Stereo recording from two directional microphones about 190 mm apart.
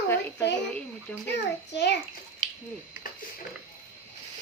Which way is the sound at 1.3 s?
65° left (ahead or behind).